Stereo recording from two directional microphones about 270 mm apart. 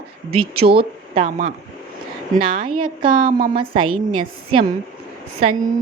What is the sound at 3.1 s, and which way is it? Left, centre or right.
Speech, right.